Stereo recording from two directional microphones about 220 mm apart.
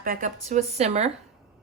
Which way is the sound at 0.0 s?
40° right (ahead or behind).